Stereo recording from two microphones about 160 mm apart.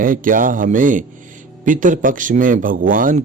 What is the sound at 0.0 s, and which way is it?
A man's voice, 60° right (ahead or behind).